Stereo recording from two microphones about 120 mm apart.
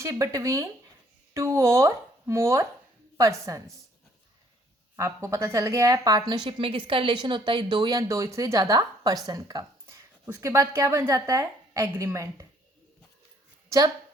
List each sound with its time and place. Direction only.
0.0 s a woman's voice: 25° right (ahead or behind)
4.9 s a woman's voice: 25° right (ahead or behind)
13.7 s a woman's voice: 30° right (ahead or behind)